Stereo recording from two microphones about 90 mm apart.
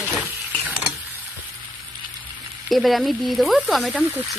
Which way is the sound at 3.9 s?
15° right (ahead or behind).